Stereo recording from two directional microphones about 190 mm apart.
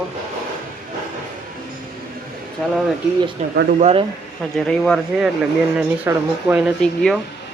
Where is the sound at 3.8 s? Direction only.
30° right (ahead or behind).